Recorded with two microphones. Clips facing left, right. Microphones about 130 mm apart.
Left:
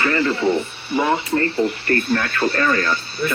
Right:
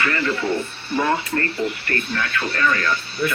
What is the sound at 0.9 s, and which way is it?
Speech, 15° left (ahead or behind).